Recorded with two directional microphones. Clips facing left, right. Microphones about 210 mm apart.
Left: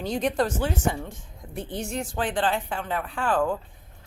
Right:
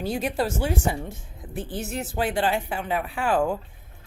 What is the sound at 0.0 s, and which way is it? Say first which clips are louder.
Speech: left 1 dB; 5° right (ahead or behind).